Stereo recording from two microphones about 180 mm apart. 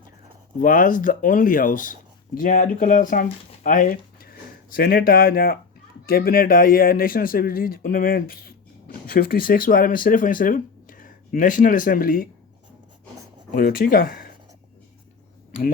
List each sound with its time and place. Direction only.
0.6 s speech: 50° left (ahead or behind)
13.5 s speech: 55° left (ahead or behind)